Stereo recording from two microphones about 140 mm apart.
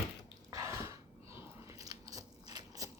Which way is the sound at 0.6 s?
20° right (ahead or behind).